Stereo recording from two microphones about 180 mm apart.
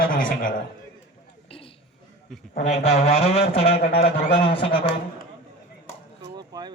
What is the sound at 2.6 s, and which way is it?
A man's voice, 35° left (ahead or behind).